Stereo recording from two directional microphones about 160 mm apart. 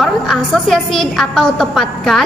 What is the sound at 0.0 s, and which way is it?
A woman's voice, centre (ahead or behind).